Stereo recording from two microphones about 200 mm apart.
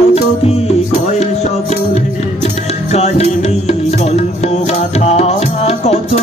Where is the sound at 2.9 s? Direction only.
35° left (ahead or behind).